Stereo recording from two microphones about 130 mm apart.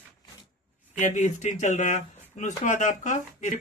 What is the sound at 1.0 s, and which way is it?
Speech, 70° left (ahead or behind).